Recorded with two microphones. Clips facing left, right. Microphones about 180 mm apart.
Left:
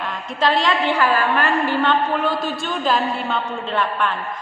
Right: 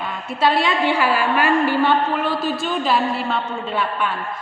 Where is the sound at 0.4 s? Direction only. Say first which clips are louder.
Right 1 dB; 5° right (ahead or behind).